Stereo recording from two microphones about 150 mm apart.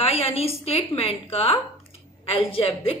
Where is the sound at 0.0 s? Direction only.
40° left (ahead or behind).